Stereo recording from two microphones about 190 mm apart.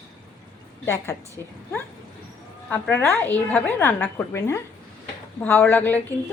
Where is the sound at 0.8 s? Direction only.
15° left (ahead or behind).